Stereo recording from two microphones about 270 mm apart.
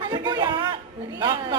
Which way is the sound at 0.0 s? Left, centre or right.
Centre.